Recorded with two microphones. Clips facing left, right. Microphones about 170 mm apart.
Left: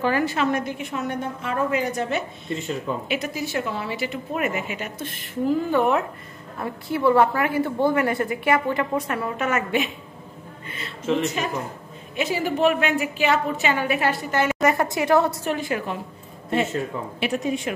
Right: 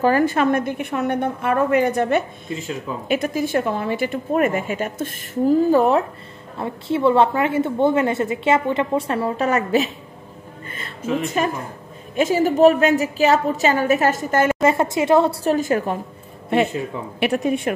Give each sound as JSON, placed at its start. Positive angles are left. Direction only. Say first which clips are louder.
{"t": 0.0, "sound": "a woman's voice", "louder": "right 5 dB", "side_deg": -50}
{"t": 6.6, "sound": "a woman's voice", "louder": "right 3 dB", "side_deg": -25}
{"t": 11.2, "sound": "a woman's voice", "louder": "right 4 dB", "side_deg": -50}
{"t": 14.6, "sound": "a woman's voice", "louder": "right 3 dB", "side_deg": -25}
{"t": 15.4, "sound": "a woman's voice", "louder": "right 7 dB", "side_deg": -40}
{"t": 17.2, "sound": "a woman's voice", "louder": "right 5 dB", "side_deg": -60}